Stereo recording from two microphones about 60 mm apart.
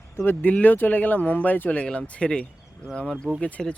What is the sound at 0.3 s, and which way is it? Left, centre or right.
Speech, left.